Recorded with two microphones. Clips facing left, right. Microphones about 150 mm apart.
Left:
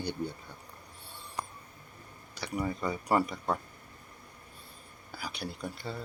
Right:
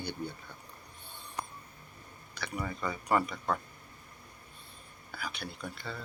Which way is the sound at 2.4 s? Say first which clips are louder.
Left 1 dB; 40° left (ahead or behind).